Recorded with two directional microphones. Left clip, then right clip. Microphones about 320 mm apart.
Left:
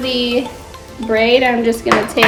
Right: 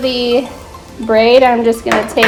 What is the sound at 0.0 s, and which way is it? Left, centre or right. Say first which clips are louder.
Speech: right 3 dB; right.